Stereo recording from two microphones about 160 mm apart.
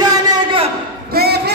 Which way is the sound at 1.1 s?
85° right.